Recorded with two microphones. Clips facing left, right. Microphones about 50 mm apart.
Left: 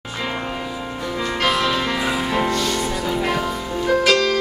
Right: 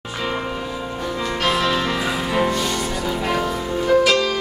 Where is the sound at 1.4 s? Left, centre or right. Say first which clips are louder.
Even; centre.